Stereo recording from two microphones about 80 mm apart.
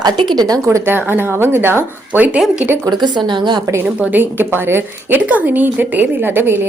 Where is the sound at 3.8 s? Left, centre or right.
Right.